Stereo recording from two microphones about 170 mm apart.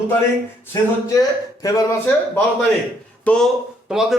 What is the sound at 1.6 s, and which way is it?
Speech, 20° left (ahead or behind).